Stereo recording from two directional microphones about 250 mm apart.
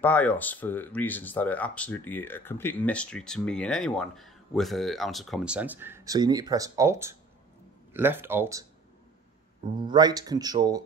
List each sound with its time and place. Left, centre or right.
0.0 s speech: centre
9.8 s speech: centre